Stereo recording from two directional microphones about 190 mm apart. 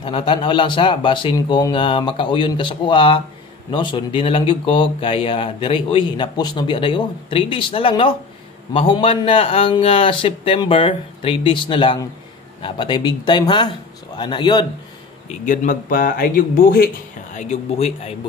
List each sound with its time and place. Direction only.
0.0 s speech: 25° left (ahead or behind)
15.2 s speech: 40° left (ahead or behind)